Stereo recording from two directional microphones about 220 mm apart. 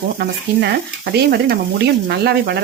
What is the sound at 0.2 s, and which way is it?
Stir, 50° right (ahead or behind).